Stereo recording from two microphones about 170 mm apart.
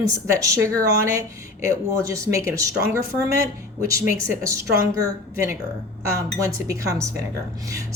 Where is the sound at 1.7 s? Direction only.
20° right (ahead or behind).